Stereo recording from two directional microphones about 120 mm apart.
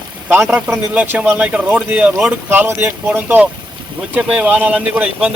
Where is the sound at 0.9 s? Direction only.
15° right (ahead or behind).